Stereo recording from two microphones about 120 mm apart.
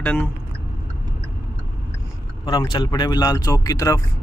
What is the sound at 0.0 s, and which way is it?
Speech, 15° left (ahead or behind).